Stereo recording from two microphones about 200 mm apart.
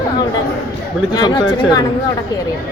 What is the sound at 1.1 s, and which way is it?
Speech, 20° left (ahead or behind).